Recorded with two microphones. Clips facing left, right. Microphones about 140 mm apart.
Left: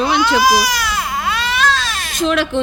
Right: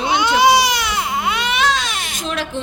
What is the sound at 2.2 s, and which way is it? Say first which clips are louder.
Speech: left 9 dB; 80° left.